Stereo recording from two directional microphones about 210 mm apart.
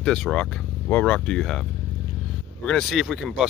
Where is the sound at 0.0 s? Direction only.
5° left (ahead or behind).